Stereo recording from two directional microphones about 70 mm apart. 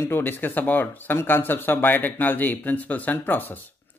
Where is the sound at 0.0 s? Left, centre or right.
Left.